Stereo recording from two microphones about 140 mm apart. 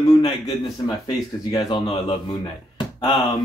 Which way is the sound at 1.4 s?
30° left (ahead or behind).